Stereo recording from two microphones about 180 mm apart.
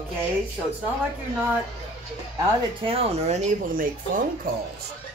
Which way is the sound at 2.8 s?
35° right (ahead or behind).